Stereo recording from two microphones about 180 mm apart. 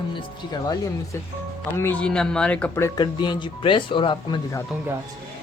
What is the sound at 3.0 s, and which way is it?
Speech, 25° left (ahead or behind).